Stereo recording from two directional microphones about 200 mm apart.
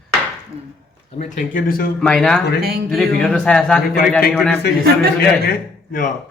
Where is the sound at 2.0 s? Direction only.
5° left (ahead or behind).